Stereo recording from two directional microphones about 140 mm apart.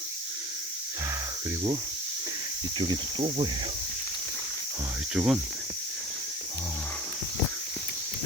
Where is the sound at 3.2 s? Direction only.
45° right (ahead or behind).